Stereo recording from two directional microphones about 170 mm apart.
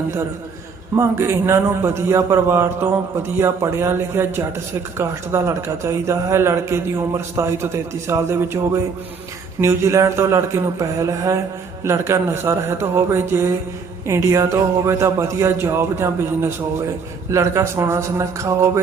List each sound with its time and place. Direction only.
0.9 s a man's voice: 15° right (ahead or behind)